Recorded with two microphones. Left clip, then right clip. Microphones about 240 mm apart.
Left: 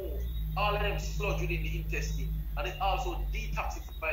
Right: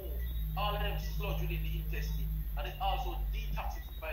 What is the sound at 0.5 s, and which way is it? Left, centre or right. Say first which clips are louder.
A man's voice: left 6 dB; centre.